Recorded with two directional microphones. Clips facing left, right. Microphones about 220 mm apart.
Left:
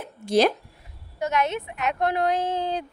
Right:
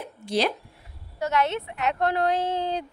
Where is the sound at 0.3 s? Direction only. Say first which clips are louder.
Left 5 dB; 45° left (ahead or behind).